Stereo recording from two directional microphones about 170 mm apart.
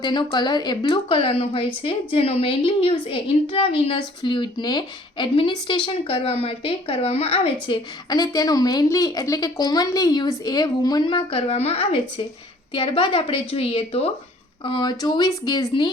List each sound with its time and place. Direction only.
0.0 s a woman's voice: 25° left (ahead or behind)